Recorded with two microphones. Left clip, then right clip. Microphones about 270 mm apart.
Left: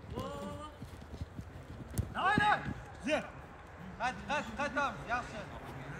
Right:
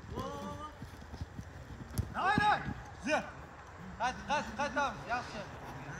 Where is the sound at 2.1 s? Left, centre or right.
Right.